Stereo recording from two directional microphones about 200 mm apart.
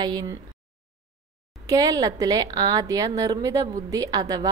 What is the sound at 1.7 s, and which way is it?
A woman's voice, 15° right (ahead or behind).